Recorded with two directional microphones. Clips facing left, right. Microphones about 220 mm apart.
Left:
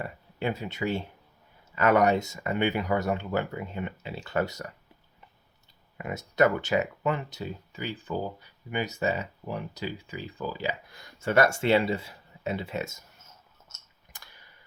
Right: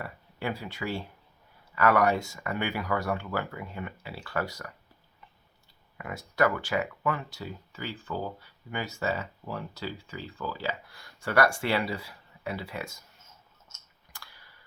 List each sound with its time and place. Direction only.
0.0 s speech: 20° left (ahead or behind)
6.0 s speech: 20° left (ahead or behind)
14.1 s clicking: 20° left (ahead or behind)